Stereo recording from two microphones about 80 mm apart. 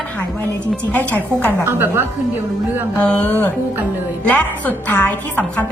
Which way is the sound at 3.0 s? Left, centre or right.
Centre.